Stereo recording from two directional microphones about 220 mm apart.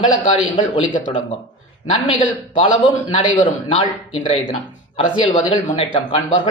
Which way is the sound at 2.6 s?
20° left (ahead or behind).